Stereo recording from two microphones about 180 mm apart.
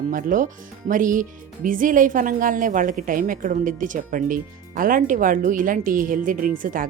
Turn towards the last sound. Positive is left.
turn(degrees=-50)  # may be behind; listen again after turning